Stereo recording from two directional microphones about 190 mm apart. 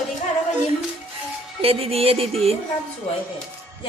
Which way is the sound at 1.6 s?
30° right (ahead or behind).